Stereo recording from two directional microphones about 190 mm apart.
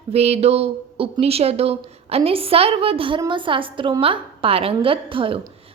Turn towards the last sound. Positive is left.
turn(degrees=-30)  # may be behind; listen again after turning